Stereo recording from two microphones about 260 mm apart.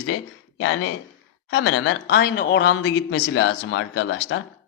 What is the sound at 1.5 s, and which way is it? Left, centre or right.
Speech, left.